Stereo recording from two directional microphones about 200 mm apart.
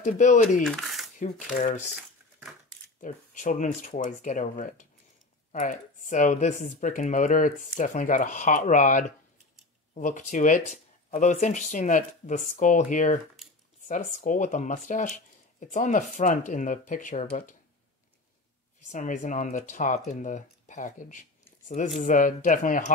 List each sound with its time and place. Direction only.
0.0 s speech: 40° left (ahead or behind)
0.7 s a sound: centre (ahead or behind)
1.6 s speech: 35° left (ahead or behind)
2.0 s crushing: centre (ahead or behind)
3.0 s speech: 40° left (ahead or behind)
18.9 s speech: 40° left (ahead or behind)